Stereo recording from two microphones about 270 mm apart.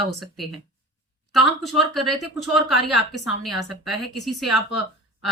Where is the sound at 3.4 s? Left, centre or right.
Centre.